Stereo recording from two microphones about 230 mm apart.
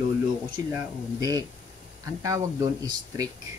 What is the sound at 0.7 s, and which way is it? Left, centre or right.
Speech, centre.